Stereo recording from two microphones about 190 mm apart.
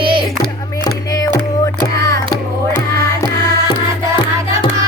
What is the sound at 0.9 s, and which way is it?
Music, 20° left (ahead or behind).